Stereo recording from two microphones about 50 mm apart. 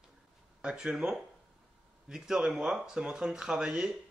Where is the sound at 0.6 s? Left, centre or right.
Centre.